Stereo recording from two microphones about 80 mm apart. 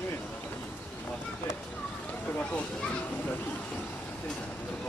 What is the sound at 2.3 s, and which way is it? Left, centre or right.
Speech, centre.